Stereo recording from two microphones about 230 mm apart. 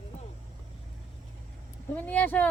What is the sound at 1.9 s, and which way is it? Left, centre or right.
Speech, centre.